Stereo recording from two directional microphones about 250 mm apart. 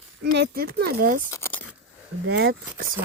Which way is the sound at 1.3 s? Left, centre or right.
Centre.